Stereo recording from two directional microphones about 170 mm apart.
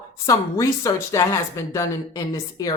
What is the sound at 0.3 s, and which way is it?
Speech, 20° left (ahead or behind).